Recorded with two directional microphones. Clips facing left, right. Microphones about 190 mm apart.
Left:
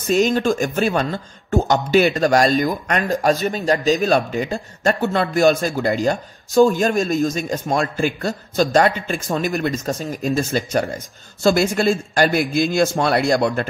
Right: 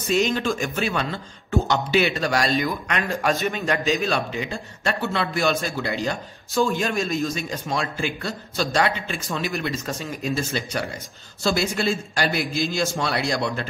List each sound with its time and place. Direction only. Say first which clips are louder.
0.1 s speech: left 5 dB; 45° left (ahead or behind)